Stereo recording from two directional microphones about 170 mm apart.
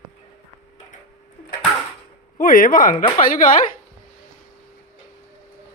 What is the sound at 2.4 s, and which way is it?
Speech, 55° left (ahead or behind).